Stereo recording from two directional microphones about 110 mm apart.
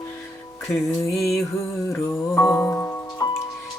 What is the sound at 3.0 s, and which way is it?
Music, 35° left (ahead or behind).